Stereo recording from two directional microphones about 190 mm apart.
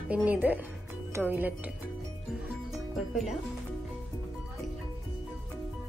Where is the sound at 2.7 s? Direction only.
Centre (ahead or behind).